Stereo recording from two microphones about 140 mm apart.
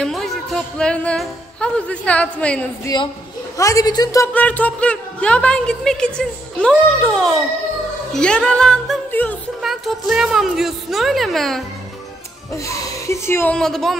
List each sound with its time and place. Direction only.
0.0 s speech: centre (ahead or behind)
2.8 s speech: 30° left (ahead or behind)
4.3 s a woman's voice: 10° left (ahead or behind)
9.6 s speech: centre (ahead or behind)
12.5 s speech: 20° left (ahead or behind)
13.6 s speech: centre (ahead or behind)